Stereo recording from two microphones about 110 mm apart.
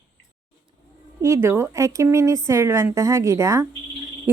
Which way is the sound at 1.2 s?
25° right (ahead or behind).